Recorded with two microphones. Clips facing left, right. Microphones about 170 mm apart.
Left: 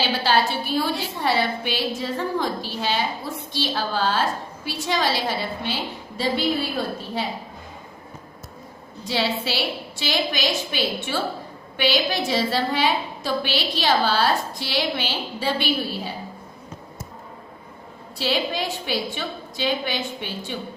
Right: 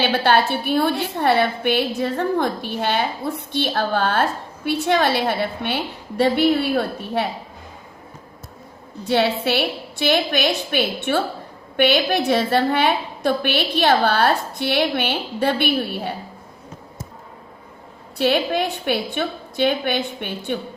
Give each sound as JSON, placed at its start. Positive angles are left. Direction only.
{"t": 0.0, "sound": "a woman's voice", "side_deg": -60}
{"t": 9.0, "sound": "a woman's voice", "side_deg": -55}
{"t": 18.2, "sound": "a woman's voice", "side_deg": -55}